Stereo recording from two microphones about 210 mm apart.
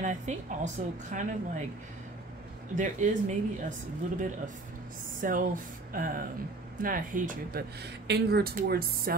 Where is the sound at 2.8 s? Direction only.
35° right (ahead or behind).